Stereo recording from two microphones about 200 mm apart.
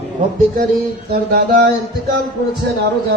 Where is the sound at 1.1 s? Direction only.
50° right (ahead or behind).